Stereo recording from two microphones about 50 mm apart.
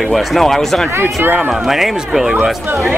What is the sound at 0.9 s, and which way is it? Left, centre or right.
Speech, right.